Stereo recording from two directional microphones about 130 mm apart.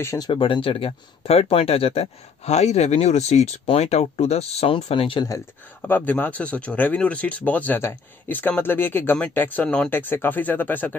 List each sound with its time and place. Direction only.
0.0 s speech: 20° left (ahead or behind)
0.3 s speech: 40° left (ahead or behind)
5.9 s speech: 15° left (ahead or behind)